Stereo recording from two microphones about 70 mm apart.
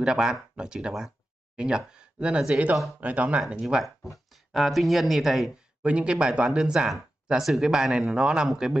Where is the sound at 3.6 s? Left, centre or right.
Centre.